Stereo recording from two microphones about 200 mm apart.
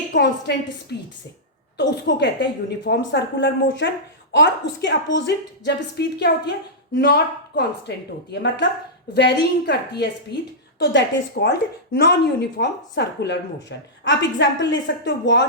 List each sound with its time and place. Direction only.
0.1 s a woman's voice: 55° left (ahead or behind)